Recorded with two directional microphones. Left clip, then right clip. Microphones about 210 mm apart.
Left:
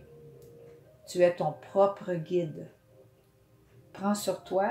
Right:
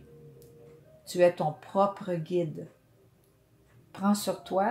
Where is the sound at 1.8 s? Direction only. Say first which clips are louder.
Left 2 dB; 35° right (ahead or behind).